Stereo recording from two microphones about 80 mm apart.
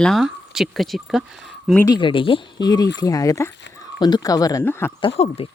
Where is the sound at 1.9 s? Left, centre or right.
Left.